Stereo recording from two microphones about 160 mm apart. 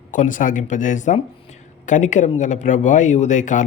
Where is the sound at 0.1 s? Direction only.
55° left (ahead or behind).